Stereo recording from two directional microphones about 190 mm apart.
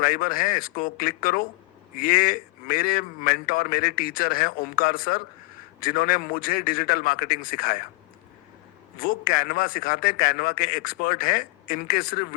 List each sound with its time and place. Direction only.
0.0 s a man's voice: 50° left (ahead or behind)
9.0 s a man's voice: 50° left (ahead or behind)